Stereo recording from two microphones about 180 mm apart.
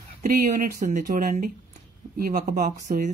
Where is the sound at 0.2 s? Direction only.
50° right (ahead or behind).